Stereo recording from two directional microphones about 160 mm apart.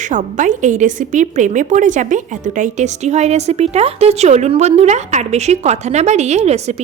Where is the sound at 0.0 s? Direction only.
50° right (ahead or behind).